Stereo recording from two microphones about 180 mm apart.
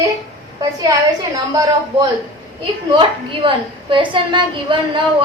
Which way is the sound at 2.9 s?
30° right (ahead or behind).